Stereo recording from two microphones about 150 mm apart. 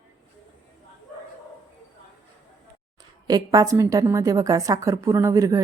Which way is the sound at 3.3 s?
25° right (ahead or behind).